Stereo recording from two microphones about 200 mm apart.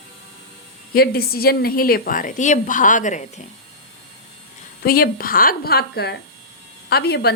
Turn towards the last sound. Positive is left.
turn(degrees=50)  # may be behind; listen again after turning